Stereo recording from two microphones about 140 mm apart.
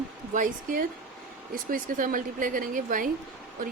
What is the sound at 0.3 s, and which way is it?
Speech, 75° right (ahead or behind).